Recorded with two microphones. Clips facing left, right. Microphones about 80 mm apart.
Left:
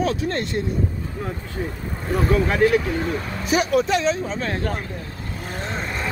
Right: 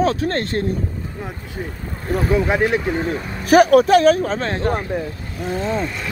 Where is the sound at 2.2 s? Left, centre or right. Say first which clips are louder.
Right 1 dB; centre.